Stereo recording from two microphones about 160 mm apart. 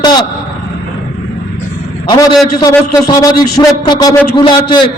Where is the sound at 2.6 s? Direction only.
20° left (ahead or behind).